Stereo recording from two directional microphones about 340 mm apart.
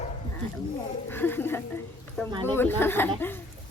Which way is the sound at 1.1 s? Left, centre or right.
Centre.